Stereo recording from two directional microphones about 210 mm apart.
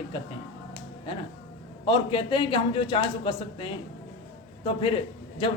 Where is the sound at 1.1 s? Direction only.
25° left (ahead or behind).